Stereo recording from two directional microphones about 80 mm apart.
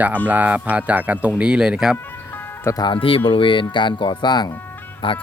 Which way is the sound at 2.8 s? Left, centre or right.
Left.